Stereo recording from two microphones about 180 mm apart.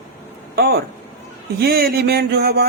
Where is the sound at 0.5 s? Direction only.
60° right (ahead or behind).